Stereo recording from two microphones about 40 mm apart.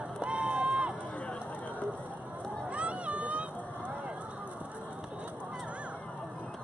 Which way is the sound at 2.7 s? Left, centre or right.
Right.